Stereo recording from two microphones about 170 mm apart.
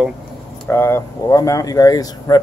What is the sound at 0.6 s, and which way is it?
Speech, 15° left (ahead or behind).